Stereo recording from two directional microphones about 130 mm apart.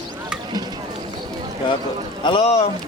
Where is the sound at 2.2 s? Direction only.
45° left (ahead or behind).